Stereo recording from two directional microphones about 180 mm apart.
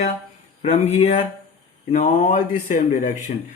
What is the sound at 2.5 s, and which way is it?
Speech, 45° left (ahead or behind).